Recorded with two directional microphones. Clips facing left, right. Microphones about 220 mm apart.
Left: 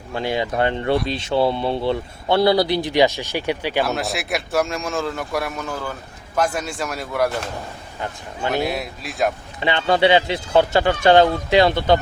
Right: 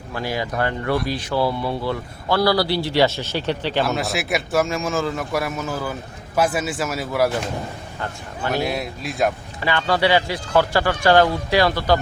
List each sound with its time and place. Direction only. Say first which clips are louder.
0.1 s speech: left 3 dB; 25° left (ahead or behind)
3.8 s speech: right 1 dB; centre (ahead or behind)
8.5 s speech: even; centre (ahead or behind)
9.6 s speech: left 3 dB; 20° left (ahead or behind)